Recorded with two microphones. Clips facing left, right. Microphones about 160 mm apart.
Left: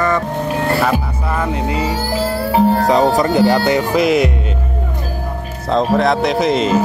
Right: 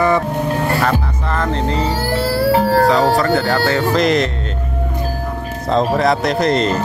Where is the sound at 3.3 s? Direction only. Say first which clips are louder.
Left 3 dB; 15° left (ahead or behind).